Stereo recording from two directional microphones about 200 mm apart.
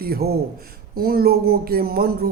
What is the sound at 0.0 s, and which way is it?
Speech, 50° right (ahead or behind).